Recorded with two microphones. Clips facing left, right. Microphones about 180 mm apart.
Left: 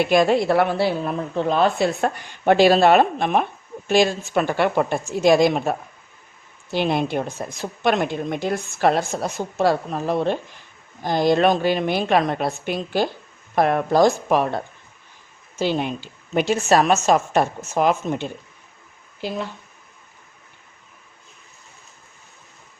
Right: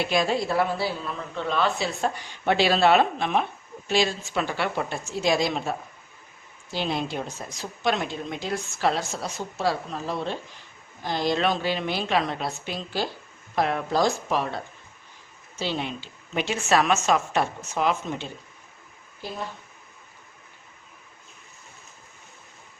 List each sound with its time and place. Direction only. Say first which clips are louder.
0.0 s a woman's voice: left 7 dB; 55° left (ahead or behind)
1.4 s a woman's voice: left 6 dB; 45° left (ahead or behind)
19.2 s speech: left 8 dB; 90° left